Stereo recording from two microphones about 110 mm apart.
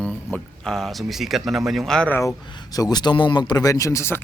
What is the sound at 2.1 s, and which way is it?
Speech, 25° left (ahead or behind).